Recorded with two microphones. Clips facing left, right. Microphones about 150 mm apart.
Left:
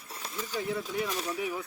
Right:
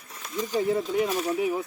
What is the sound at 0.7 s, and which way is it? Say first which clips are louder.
Speech: right 7 dB; 40° right (ahead or behind).